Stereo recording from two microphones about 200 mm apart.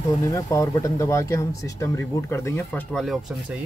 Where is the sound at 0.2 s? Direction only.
15° left (ahead or behind); by 3.5 s centre (ahead or behind).